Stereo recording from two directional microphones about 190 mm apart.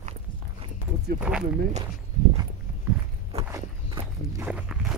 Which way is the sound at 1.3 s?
5° right (ahead or behind).